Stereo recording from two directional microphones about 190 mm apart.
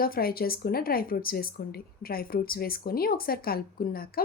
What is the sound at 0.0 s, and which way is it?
A woman's voice, 50° left (ahead or behind).